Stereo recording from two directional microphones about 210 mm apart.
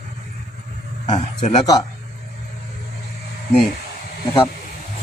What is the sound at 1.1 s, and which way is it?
Speech, 30° left (ahead or behind).